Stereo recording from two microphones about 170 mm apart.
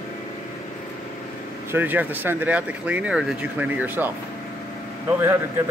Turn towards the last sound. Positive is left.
turn(degrees=-15)  # may be behind; listen again after turning